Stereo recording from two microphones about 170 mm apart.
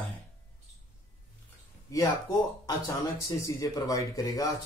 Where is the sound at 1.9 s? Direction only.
20° left (ahead or behind).